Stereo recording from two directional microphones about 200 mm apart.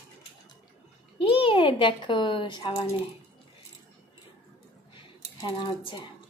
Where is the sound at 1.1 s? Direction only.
25° left (ahead or behind).